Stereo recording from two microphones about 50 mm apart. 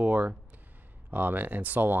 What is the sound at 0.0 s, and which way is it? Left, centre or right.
Speech, right.